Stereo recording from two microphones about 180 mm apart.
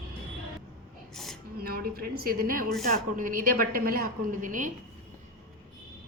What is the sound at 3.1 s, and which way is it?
A woman's voice, 50° right (ahead or behind).